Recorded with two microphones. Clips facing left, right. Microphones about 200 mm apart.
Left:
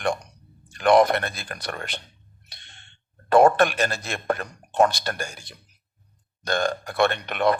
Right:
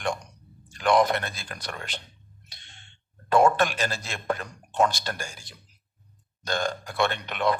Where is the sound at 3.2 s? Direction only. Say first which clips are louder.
Left 4 dB; 60° left (ahead or behind).